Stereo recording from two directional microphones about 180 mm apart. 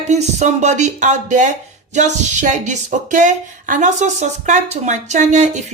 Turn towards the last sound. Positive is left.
turn(degrees=-40)  # may be behind; listen again after turning